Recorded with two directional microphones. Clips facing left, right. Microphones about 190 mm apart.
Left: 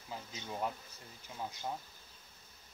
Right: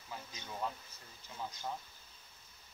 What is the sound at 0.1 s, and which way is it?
Speech, 20° left (ahead or behind).